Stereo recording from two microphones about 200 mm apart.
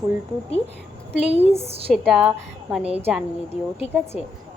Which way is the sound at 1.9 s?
Centre (ahead or behind).